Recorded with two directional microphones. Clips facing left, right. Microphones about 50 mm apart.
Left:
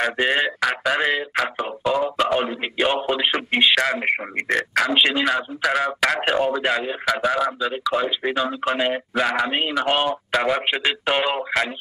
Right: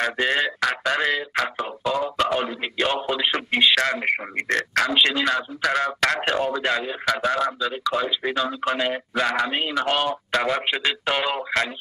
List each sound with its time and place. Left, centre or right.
0.0 s a man's voice: centre
4.5 s speech: centre
9.5 s a man's voice: centre